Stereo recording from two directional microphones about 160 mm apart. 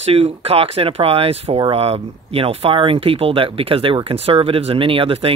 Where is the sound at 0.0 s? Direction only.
40° right (ahead or behind).